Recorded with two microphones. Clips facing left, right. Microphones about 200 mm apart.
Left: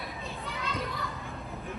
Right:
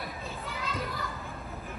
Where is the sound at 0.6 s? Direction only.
Centre (ahead or behind).